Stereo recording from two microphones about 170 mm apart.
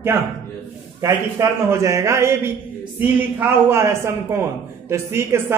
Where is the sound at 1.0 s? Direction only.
15° right (ahead or behind).